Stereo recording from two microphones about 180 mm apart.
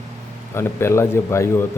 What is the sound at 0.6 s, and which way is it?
Speech, 15° left (ahead or behind).